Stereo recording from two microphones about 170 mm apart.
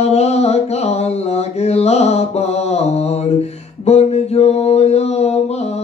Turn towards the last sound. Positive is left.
turn(degrees=40)  # may be behind; listen again after turning